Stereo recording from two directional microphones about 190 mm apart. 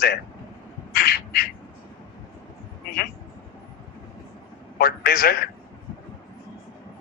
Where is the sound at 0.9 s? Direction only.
50° left (ahead or behind).